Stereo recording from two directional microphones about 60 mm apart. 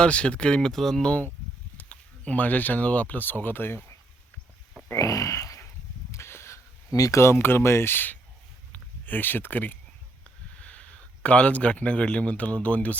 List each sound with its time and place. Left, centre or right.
0.0 s speech: centre
0.7 s speech: centre
1.8 s speech: left
4.9 s speech: left
6.1 s a sound: left
6.9 s speech: left
7.2 s speech: left
8.7 s a sound: left
10.6 s speech: left